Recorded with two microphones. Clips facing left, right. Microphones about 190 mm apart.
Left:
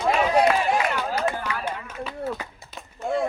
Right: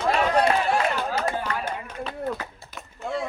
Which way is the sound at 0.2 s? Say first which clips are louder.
Left 2 dB; 10° left (ahead or behind).